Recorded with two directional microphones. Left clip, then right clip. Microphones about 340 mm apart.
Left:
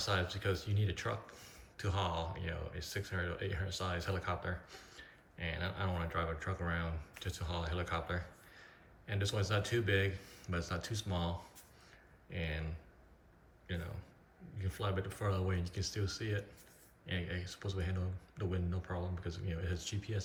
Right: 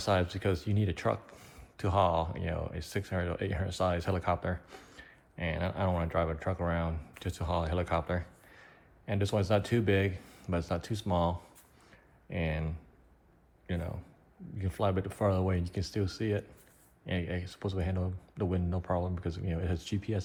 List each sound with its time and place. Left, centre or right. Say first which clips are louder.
0.0 s speech: right 6 dB; centre
13.7 s speech: right 6 dB; centre